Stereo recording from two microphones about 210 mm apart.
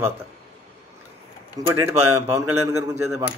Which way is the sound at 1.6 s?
15° right (ahead or behind).